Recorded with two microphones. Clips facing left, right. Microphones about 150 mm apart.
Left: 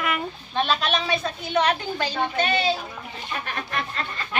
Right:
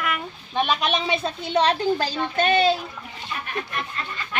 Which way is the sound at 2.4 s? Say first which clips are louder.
Right 6 dB; 50° right (ahead or behind).